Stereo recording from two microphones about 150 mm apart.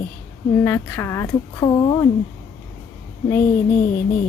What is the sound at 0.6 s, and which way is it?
A woman's voice, 15° left (ahead or behind).